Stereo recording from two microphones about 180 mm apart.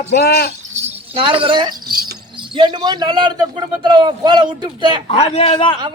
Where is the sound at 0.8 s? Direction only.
30° right (ahead or behind).